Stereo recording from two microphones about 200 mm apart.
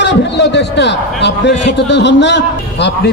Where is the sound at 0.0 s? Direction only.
60° left (ahead or behind).